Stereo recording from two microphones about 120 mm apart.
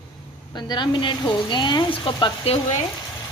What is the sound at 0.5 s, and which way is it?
Speech, 40° left (ahead or behind).